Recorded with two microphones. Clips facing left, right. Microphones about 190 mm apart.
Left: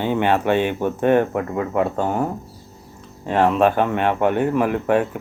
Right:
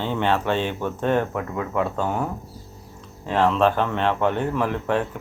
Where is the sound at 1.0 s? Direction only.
60° left (ahead or behind).